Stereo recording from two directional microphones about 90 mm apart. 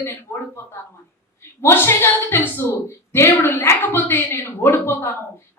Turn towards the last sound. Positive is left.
turn(degrees=25)  # may be behind; listen again after turning